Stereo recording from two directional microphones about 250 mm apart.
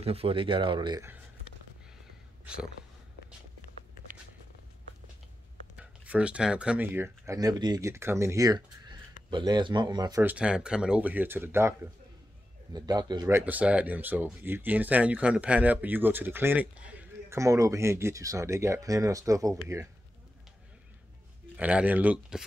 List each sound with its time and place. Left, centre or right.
0.0 s speech: right
5.8 s speech: centre
21.5 s speech: centre